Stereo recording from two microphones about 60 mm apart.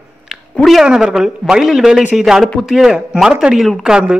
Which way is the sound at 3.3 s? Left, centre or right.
Centre.